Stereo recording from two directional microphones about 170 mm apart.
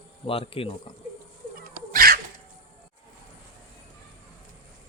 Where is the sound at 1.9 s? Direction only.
60° right (ahead or behind).